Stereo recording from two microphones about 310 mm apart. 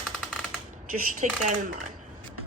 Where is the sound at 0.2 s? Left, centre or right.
Centre.